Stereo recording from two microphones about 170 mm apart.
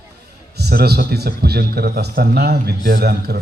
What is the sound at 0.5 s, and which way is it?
Speech, 65° right (ahead or behind).